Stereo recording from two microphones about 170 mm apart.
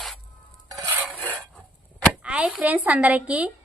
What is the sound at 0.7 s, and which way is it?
Stir, 20° right (ahead or behind).